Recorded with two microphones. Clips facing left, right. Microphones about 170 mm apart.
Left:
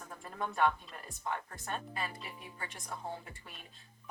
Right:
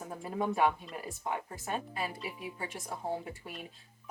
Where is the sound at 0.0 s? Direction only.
20° right (ahead or behind).